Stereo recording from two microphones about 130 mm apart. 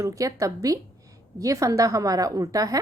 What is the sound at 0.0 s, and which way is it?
A woman's voice, 25° right (ahead or behind).